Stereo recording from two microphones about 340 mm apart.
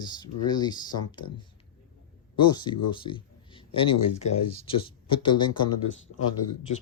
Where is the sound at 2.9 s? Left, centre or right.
Centre.